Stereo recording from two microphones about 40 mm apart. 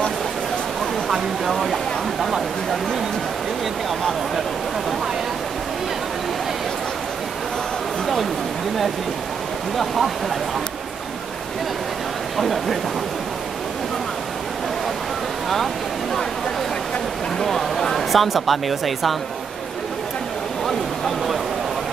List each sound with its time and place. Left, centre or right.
1.5 s speech: centre
9.8 s speech: centre
12.4 s speech: centre
17.4 s speech: centre
20.6 s a sound: centre